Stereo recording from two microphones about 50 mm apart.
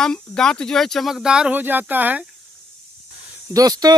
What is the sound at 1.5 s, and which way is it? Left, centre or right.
Speech, right.